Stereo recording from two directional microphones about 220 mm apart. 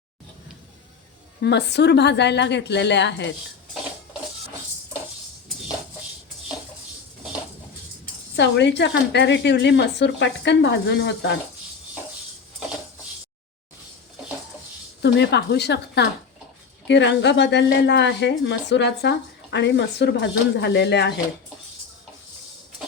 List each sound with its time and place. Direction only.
1.4 s a woman's voice: 50° left (ahead or behind)
8.4 s a woman's voice: 50° left (ahead or behind)
15.0 s a woman's voice: 50° left (ahead or behind)